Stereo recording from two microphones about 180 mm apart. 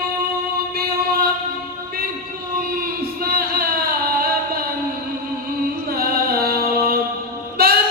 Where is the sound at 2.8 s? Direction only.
55° right (ahead or behind).